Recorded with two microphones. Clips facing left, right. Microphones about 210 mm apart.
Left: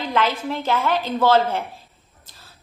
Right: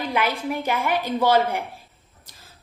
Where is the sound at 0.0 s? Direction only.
10° right (ahead or behind).